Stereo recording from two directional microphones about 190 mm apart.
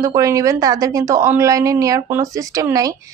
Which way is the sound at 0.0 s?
15° right (ahead or behind).